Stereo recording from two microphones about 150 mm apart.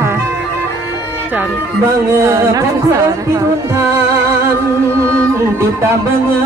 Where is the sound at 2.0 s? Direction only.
20° right (ahead or behind).